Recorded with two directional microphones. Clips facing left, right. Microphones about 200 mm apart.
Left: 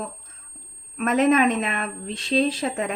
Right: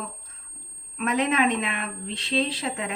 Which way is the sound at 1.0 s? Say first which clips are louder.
Left 5 dB; 45° left (ahead or behind).